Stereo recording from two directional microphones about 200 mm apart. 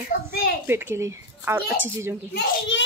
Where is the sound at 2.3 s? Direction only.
55° left (ahead or behind).